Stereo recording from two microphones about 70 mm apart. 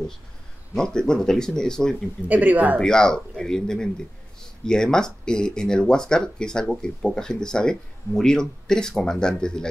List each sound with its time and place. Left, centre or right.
0.7 s speech: centre
2.2 s speech: right
2.8 s speech: centre